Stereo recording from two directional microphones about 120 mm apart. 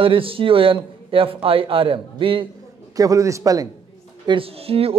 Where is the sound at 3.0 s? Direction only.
30° right (ahead or behind).